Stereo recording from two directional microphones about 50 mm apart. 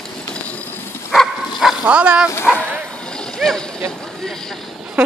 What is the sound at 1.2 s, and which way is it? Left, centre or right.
Dog, centre.